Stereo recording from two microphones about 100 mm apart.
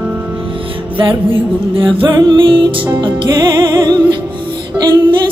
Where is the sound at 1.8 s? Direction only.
60° right (ahead or behind).